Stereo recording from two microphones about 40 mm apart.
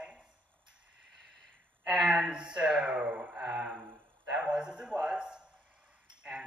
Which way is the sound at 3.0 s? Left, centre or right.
Right.